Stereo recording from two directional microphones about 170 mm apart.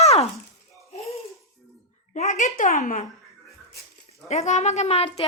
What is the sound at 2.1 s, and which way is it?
Speech, 45° left (ahead or behind).